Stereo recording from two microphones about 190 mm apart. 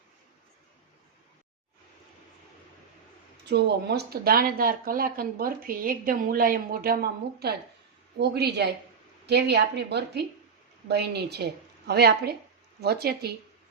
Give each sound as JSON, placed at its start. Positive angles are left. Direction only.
{"t": 3.5, "sound": "a woman's voice", "side_deg": -60}